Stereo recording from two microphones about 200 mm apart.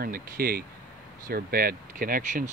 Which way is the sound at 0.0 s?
50° right (ahead or behind).